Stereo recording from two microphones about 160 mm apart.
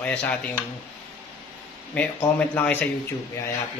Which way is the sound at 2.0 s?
10° left (ahead or behind).